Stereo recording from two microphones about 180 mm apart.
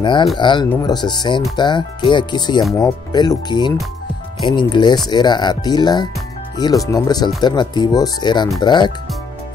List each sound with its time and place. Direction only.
0.0 s speech: 25° left (ahead or behind)